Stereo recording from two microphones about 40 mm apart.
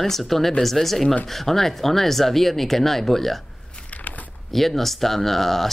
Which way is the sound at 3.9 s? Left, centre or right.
Left.